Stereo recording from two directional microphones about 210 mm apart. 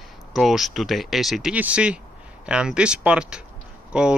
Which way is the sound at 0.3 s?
Centre (ahead or behind).